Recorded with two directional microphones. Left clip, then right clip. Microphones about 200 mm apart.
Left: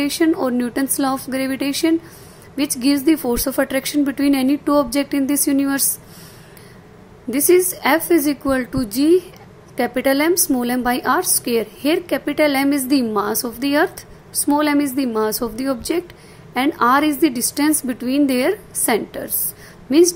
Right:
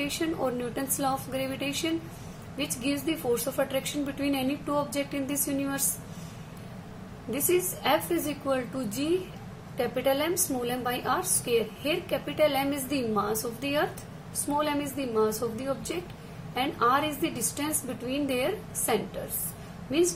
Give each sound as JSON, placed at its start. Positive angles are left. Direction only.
{"t": 0.2, "sound": "a woman's voice", "side_deg": 50}
{"t": 7.3, "sound": "a woman's voice", "side_deg": 45}